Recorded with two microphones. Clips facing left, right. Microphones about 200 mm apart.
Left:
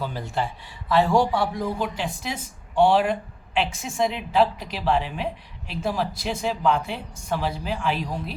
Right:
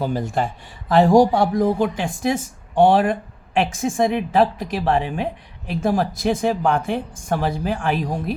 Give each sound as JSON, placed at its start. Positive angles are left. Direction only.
{"t": 0.0, "sound": "a woman's voice", "side_deg": -45}